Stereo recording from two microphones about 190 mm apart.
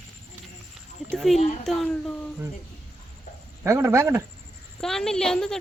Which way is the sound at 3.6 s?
15° right (ahead or behind).